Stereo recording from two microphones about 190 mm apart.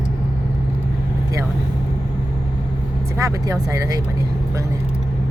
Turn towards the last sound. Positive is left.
turn(degrees=-15)  # may be behind; listen again after turning